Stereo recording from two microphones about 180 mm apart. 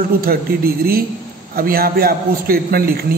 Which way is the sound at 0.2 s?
55° right (ahead or behind).